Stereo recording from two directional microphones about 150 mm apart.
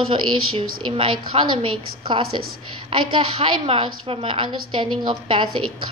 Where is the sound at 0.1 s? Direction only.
35° right (ahead or behind).